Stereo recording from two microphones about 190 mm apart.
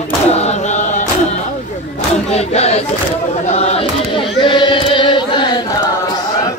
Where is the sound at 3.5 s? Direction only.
30° left (ahead or behind).